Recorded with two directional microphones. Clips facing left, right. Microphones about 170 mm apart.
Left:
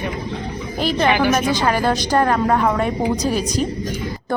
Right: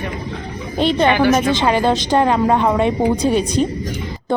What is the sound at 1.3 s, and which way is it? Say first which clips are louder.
A woman's voice: right 3 dB; 25° right (ahead or behind).